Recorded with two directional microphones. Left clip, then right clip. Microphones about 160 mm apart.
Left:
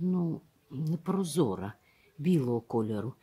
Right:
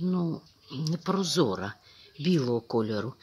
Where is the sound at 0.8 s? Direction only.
10° left (ahead or behind).